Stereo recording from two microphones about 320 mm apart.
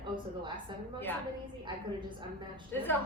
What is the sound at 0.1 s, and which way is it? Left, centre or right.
Speech, right.